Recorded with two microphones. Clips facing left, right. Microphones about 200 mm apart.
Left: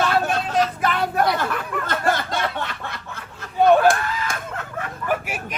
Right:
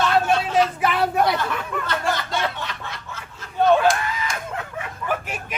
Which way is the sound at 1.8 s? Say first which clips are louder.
Left 4 dB; 50° left (ahead or behind).